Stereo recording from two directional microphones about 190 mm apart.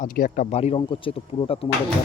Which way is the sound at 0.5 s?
30° left (ahead or behind).